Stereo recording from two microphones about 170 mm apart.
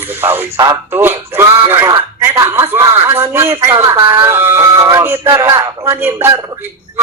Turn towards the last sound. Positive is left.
turn(degrees=-15)  # may be behind; listen again after turning